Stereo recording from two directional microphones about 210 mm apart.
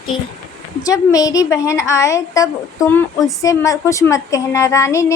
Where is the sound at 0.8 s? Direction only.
15° left (ahead or behind).